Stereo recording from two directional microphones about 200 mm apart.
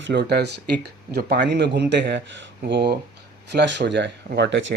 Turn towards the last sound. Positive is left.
turn(degrees=-60)  # may be behind; listen again after turning